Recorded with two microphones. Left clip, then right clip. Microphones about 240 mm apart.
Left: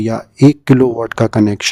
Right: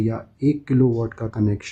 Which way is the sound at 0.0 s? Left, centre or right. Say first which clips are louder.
Left 11 dB; left.